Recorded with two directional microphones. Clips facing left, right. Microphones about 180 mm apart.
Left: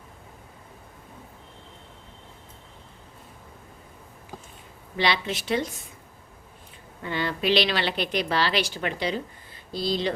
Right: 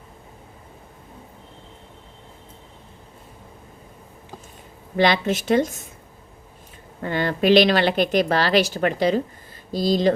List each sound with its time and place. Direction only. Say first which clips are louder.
4.9 s speech: right 7 dB; 50° right (ahead or behind)
7.0 s speech: right 6 dB; 50° right (ahead or behind)